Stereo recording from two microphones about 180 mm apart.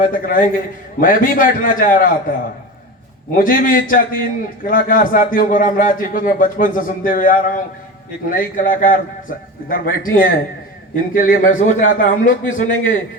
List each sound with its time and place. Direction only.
0.0 s a man's voice: 50° left (ahead or behind)
3.3 s a man's voice: 50° left (ahead or behind)